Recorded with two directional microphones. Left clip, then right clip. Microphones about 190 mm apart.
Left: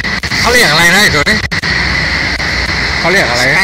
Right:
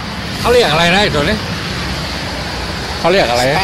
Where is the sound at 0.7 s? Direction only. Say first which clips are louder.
Left 4 dB; 10° left (ahead or behind).